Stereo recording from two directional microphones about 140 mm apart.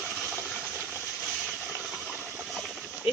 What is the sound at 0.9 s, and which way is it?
Steam, centre (ahead or behind).